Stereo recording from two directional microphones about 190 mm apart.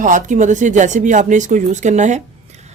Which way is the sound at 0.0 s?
40° right (ahead or behind).